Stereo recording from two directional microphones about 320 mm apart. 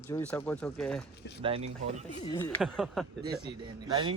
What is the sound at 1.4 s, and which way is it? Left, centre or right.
Speech, centre.